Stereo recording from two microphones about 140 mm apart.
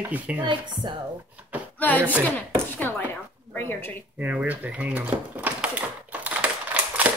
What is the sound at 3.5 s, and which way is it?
Dog, 15° left (ahead or behind).